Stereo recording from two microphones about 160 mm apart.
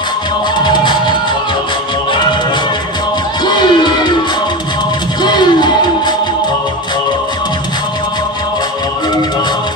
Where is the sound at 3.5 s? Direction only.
30° left (ahead or behind).